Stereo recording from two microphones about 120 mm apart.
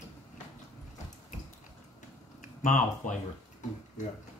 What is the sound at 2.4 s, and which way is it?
Speech, 90° left.